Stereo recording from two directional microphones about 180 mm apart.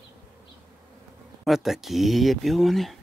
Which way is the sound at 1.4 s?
Centre (ahead or behind).